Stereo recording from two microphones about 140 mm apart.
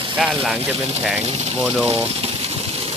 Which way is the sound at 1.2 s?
45° right (ahead or behind).